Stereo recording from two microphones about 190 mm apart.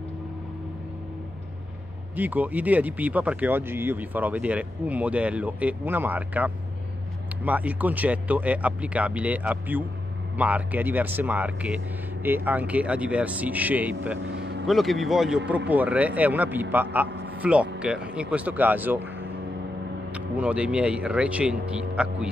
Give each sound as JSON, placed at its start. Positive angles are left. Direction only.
{"t": 2.1, "sound": "speech", "side_deg": -10}
{"t": 14.2, "sound": "vehicle", "side_deg": -65}
{"t": 14.7, "sound": "a man's voice", "side_deg": 0}
{"t": 20.1, "sound": "speech", "side_deg": -5}